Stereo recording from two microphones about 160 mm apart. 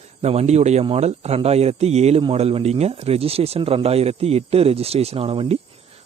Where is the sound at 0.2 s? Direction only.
40° right (ahead or behind).